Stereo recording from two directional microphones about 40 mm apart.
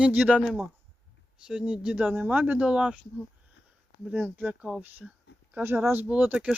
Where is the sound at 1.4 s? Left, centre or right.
Right.